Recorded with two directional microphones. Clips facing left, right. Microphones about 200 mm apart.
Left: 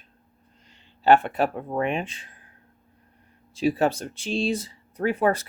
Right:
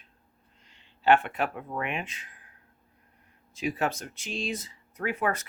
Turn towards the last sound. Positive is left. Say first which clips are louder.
# left 7 dB
turn(degrees=30)  # may be behind; listen again after turning